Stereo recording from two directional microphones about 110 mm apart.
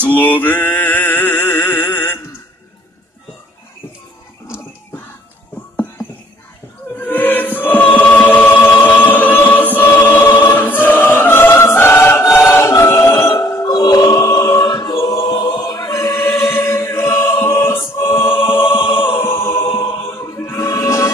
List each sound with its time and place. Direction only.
0.1 s a sound: 15° left (ahead or behind)
7.0 s choir: 15° left (ahead or behind)
18.5 s music: 20° left (ahead or behind)